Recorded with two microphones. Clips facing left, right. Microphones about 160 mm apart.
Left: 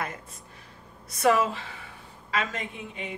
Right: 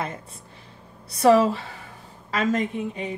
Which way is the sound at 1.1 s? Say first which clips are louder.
Right 6 dB; 30° right (ahead or behind).